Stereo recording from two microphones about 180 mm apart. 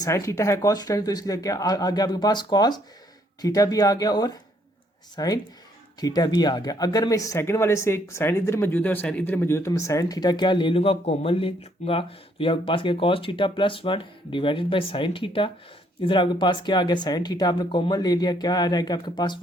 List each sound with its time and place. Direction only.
0.0 s speech: 15° left (ahead or behind)